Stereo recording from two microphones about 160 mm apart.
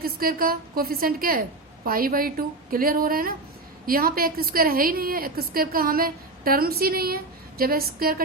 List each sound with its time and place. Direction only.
0.0 s a woman's voice: 65° right (ahead or behind)